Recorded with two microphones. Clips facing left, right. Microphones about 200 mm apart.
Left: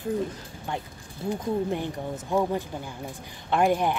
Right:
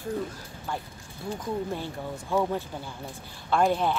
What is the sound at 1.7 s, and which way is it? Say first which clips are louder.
Speech: left 4 dB; 15° left (ahead or behind).